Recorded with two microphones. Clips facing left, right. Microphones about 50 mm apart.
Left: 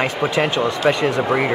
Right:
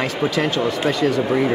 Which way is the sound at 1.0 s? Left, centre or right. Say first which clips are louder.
Even; left.